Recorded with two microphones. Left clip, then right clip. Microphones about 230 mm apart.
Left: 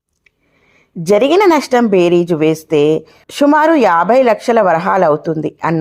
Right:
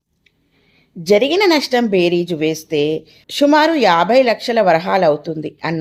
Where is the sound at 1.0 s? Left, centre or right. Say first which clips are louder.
Left 3 dB; centre.